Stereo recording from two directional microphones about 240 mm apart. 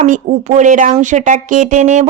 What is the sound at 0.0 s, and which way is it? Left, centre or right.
Speech, right.